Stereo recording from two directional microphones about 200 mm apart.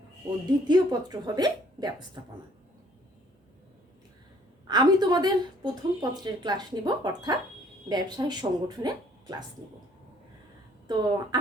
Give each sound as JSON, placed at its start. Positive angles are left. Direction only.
{"t": 0.7, "sound": "a woman's voice", "side_deg": -20}
{"t": 4.7, "sound": "a woman's voice", "side_deg": -20}
{"t": 10.8, "sound": "a woman's voice", "side_deg": -20}